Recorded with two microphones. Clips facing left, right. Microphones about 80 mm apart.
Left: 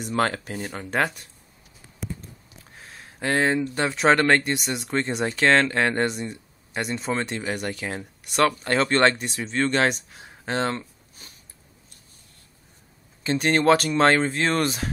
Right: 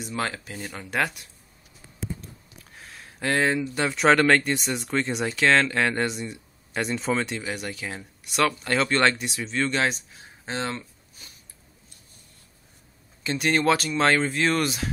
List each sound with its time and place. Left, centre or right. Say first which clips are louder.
0.0 s speech: left 6 dB; left
0.6 s speech: left 2 dB; left
2.6 s a sound: even; left
3.6 s speech: even; left
11.2 s a sound: left 1 dB; left
13.2 s speech: left 2 dB; left